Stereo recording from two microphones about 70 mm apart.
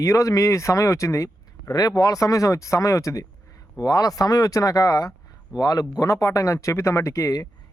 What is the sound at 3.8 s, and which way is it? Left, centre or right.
A man's voice, left.